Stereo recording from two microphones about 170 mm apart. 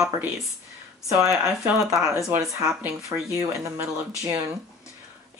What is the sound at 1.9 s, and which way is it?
Speech, 15° right (ahead or behind).